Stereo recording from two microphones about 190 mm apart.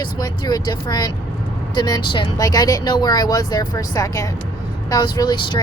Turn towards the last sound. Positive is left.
turn(degrees=25)  # may be behind; listen again after turning